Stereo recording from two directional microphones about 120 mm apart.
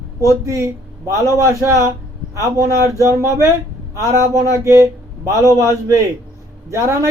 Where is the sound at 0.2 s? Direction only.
25° right (ahead or behind).